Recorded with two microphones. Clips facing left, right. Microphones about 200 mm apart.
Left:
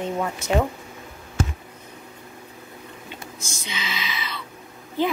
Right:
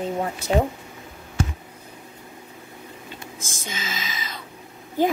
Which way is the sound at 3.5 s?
50° right (ahead or behind).